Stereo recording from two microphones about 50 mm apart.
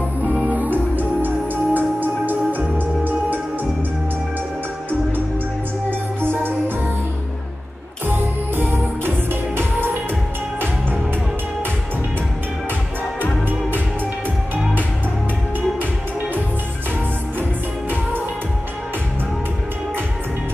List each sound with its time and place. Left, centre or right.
0.3 s music: right
5.9 s music: right
8.1 s music: right
17.4 s music: right